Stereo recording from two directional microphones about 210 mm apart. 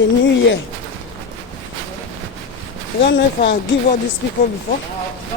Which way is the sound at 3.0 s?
55° left (ahead or behind).